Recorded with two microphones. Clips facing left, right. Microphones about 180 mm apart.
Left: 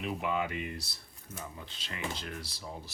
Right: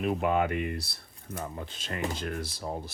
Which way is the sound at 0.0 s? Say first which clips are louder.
Right 6 dB; 50° right (ahead or behind).